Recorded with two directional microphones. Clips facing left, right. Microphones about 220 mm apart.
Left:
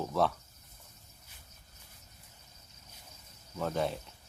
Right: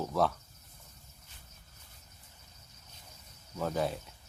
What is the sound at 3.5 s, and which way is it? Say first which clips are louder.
Speech: even; centre (ahead or behind).